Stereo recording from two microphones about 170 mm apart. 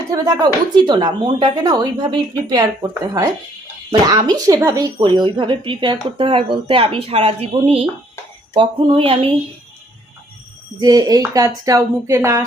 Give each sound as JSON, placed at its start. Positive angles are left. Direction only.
{"t": 0.1, "sound": "speech", "side_deg": -20}
{"t": 4.0, "sound": "speech", "side_deg": -25}
{"t": 10.8, "sound": "speech", "side_deg": -25}